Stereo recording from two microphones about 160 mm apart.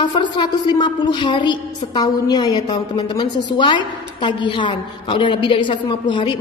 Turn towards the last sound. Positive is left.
turn(degrees=30)  # may be behind; listen again after turning